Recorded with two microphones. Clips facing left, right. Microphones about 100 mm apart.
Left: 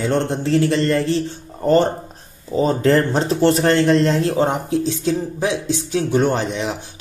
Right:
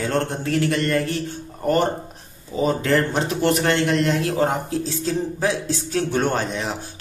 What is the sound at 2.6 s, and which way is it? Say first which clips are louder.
Speech: left 3 dB; 35° left (ahead or behind).